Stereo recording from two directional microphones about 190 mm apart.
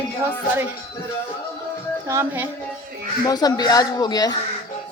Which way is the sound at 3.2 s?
20° left (ahead or behind).